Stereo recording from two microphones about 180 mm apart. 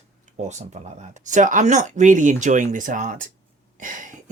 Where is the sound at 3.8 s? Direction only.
45° right (ahead or behind).